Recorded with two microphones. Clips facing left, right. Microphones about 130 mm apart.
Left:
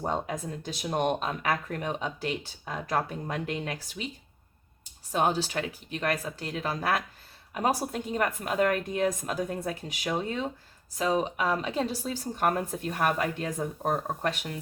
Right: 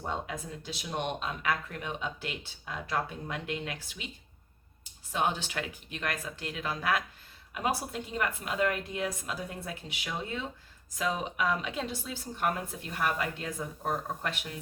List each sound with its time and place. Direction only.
0.0 s speech: 40° left (ahead or behind)
5.1 s a woman's voice: 40° left (ahead or behind)